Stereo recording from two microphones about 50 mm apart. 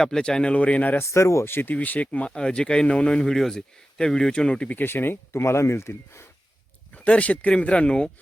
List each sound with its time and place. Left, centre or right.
0.0 s speech: centre; by 0.9 s left
1.0 s speech: left
1.5 s speech: left
1.7 s speech: left
4.8 s speech: left
5.3 s speech: left
6.9 s speech: left